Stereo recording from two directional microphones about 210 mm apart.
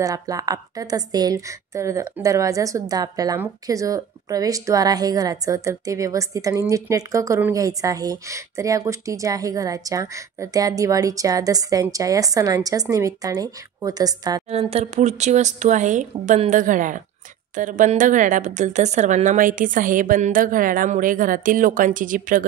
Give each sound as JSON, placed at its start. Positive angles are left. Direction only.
{"t": 0.0, "sound": "a woman's voice", "side_deg": -15}
{"t": 14.5, "sound": "a woman's voice", "side_deg": -30}